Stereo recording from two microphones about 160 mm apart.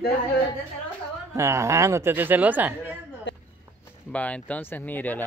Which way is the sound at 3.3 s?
90° left.